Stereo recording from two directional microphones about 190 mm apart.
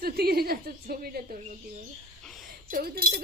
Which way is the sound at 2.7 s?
55° right (ahead or behind).